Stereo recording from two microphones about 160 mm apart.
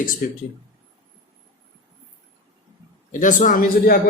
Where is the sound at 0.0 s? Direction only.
55° left (ahead or behind).